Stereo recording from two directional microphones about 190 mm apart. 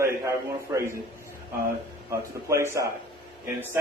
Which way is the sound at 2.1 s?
15° right (ahead or behind).